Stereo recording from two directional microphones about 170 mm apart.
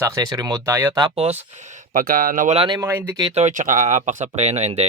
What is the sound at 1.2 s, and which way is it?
Speech, 40° right (ahead or behind).